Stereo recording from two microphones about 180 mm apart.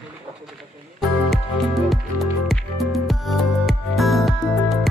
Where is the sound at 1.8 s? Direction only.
Centre (ahead or behind).